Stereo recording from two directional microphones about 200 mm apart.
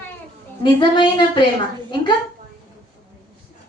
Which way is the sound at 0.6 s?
20° left (ahead or behind).